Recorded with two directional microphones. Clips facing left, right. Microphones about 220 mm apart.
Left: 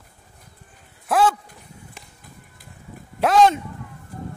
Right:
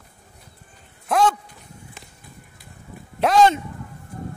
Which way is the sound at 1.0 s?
5° left (ahead or behind).